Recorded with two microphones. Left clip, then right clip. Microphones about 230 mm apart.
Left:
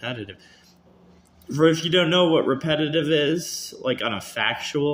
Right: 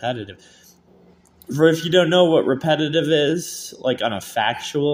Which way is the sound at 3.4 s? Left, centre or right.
Right.